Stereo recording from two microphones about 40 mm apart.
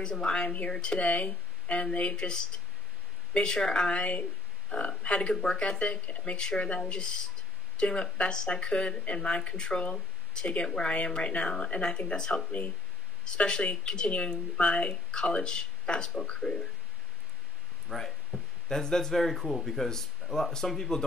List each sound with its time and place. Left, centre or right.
0.0 s speech: left
3.4 s speech: left
5.3 s speech: centre
5.6 s speech: left
13.8 s speech: left
17.8 s speech: centre